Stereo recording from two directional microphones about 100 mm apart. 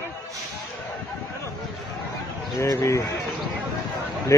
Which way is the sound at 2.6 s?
30° left (ahead or behind).